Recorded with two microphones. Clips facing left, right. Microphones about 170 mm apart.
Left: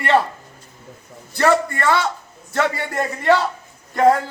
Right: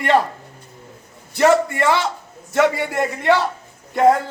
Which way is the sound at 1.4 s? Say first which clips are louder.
Right 2 dB; 20° right (ahead or behind).